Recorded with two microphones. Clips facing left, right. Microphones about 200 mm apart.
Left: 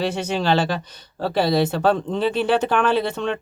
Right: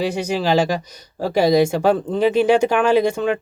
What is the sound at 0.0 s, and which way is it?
Speech, 10° right (ahead or behind).